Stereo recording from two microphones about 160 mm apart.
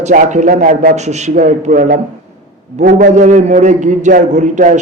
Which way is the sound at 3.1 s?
50° right (ahead or behind).